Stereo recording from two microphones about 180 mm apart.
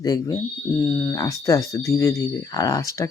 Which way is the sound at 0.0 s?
20° left (ahead or behind).